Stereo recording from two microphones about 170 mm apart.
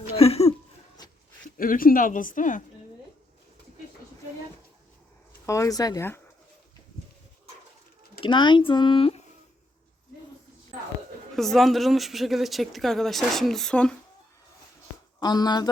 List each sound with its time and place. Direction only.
0.2 s a sound: 35° left (ahead or behind)
1.5 s speech: 55° left (ahead or behind)
5.5 s speech: 20° left (ahead or behind)
8.2 s speech: 30° left (ahead or behind)
11.3 s speech: centre (ahead or behind)
15.2 s speech: 25° left (ahead or behind)